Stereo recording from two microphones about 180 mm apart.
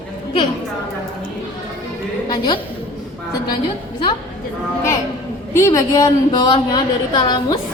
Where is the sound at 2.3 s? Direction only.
25° left (ahead or behind).